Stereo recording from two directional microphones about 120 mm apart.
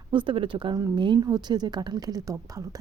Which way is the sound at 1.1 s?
25° right (ahead or behind).